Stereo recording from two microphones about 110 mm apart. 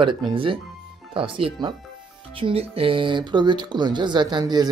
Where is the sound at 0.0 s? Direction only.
45° right (ahead or behind).